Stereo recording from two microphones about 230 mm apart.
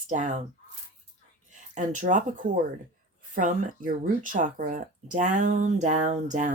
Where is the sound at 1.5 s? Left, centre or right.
Right.